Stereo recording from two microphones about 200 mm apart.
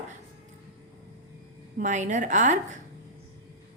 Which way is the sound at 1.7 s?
35° right (ahead or behind).